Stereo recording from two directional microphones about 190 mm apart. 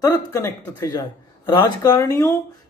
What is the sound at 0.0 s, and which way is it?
Speech, 15° left (ahead or behind).